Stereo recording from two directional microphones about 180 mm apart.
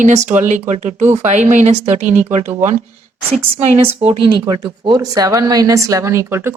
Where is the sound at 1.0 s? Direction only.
15° right (ahead or behind).